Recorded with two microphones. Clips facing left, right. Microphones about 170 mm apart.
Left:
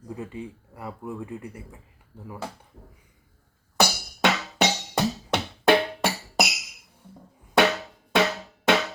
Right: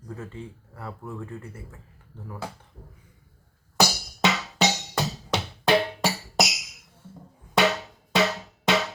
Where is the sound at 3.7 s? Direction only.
55° left (ahead or behind).